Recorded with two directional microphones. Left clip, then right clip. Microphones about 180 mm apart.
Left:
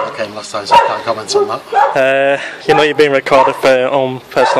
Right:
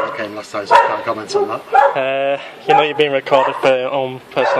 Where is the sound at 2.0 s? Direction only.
45° left (ahead or behind).